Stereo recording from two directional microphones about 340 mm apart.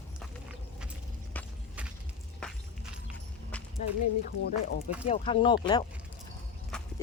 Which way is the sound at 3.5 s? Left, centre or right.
Centre.